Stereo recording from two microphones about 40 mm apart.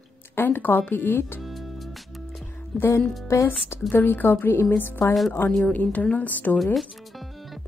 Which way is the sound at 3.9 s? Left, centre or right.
Left.